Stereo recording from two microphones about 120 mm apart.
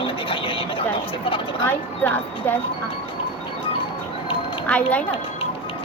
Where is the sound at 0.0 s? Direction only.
50° left (ahead or behind).